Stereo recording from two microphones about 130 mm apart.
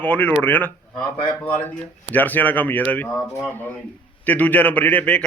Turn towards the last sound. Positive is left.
turn(degrees=10)  # may be behind; listen again after turning